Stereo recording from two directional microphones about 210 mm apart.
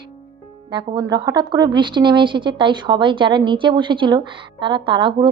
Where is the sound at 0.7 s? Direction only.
20° right (ahead or behind).